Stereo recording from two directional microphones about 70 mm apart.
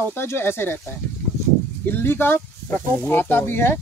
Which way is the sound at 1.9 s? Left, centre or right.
Left.